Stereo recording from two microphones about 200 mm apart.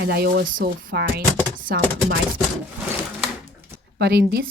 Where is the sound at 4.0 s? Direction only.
55° right (ahead or behind).